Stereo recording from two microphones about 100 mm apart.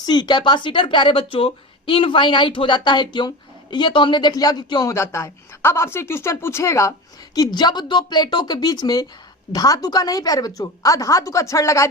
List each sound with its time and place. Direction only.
0.0 s speech: 45° left (ahead or behind)
4.9 s speech: 30° left (ahead or behind)
7.3 s speech: 45° left (ahead or behind)